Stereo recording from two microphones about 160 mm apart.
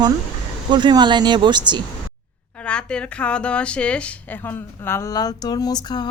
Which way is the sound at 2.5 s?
5° left (ahead or behind).